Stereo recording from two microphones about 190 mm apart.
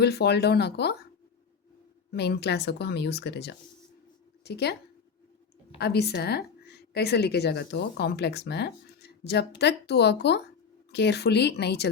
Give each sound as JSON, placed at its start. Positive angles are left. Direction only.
{"t": 0.0, "sound": "a woman's voice", "side_deg": 60}
{"t": 2.1, "sound": "a woman's voice", "side_deg": 60}
{"t": 5.8, "sound": "a woman's voice", "side_deg": 60}